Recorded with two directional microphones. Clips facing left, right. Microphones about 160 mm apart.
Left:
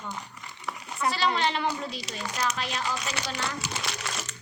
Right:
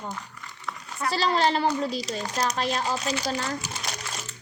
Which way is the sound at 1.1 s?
35° right (ahead or behind).